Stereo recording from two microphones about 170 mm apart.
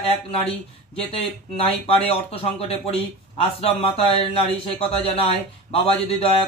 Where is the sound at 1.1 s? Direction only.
35° left (ahead or behind).